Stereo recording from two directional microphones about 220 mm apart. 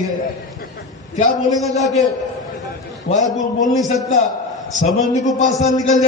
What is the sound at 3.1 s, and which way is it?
A man's voice, 35° left (ahead or behind).